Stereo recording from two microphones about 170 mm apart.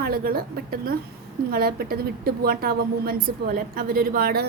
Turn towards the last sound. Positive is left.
turn(degrees=-60)  # may be behind; listen again after turning